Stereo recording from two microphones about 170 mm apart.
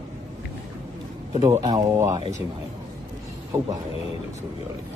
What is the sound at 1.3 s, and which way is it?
Speech, 20° right (ahead or behind).